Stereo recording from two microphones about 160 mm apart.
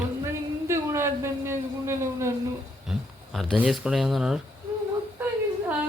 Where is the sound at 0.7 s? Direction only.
15° right (ahead or behind).